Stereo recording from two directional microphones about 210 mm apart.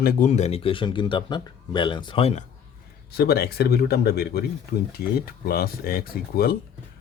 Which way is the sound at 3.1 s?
50° left (ahead or behind).